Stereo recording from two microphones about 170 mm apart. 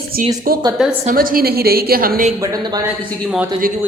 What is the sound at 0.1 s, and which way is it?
Speech, 60° right (ahead or behind).